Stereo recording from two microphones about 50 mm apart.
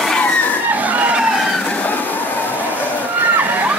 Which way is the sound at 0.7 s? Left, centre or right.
Right.